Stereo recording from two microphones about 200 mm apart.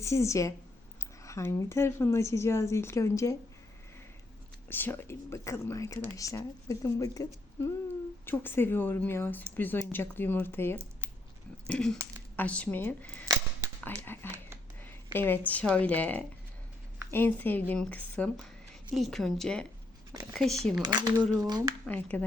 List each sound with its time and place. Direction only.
0.0 s a woman's voice: 15° left (ahead or behind)
4.7 s a woman's voice: 10° left (ahead or behind)
8.3 s a woman's voice: 10° left (ahead or behind)
14.8 s a sound: 10° left (ahead or behind)
15.6 s a woman's voice: 5° left (ahead or behind)
20.8 s speech: 20° right (ahead or behind)
21.8 s a woman's voice: 10° left (ahead or behind)